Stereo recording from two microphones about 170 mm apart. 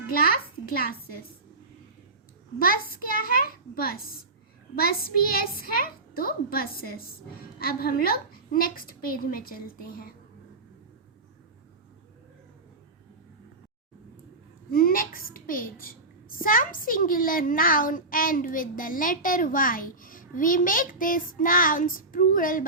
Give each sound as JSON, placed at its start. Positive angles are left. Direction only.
{"t": 0.1, "sound": "a child's voice", "side_deg": 60}
{"t": 2.6, "sound": "a woman's voice", "side_deg": 60}
{"t": 14.7, "sound": "a woman's voice", "side_deg": 60}